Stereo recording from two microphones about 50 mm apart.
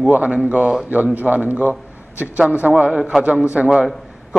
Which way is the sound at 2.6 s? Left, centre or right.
Centre.